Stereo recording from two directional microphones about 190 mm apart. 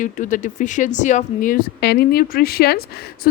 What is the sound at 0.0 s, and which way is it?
A woman's voice, 40° left (ahead or behind).